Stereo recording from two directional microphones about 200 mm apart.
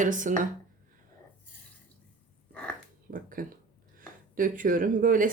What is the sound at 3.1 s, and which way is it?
Speech, 45° right (ahead or behind).